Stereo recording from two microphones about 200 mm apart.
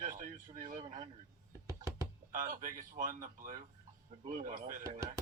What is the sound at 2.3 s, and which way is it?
Speech, 40° right (ahead or behind).